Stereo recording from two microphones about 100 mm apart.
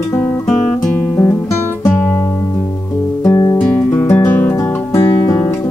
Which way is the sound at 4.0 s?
25° left (ahead or behind).